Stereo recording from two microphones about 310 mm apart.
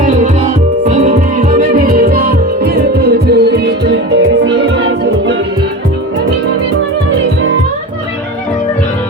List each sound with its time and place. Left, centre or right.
0.9 s music: centre; by 5.4 s right